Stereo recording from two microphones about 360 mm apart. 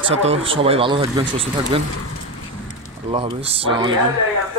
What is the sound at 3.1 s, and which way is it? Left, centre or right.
Speech, centre.